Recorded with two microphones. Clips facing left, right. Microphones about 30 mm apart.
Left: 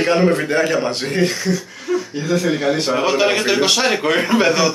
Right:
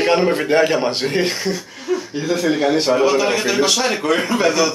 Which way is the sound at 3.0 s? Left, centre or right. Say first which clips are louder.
Even; centre.